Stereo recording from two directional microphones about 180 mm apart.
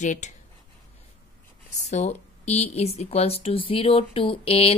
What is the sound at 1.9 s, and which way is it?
Speech, 40° left (ahead or behind).